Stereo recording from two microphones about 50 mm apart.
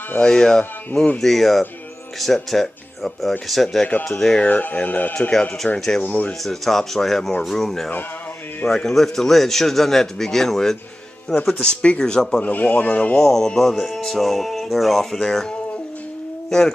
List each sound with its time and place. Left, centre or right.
0.2 s a man's voice: centre
1.2 s a man's voice: centre
4.4 s speech: left
5.8 s a man's voice: centre
6.0 s speech: left
6.4 s a man's voice: centre
11.6 s a man's voice: left
12.4 s speech: left
13.1 s a man's voice: centre
16.4 s speech: centre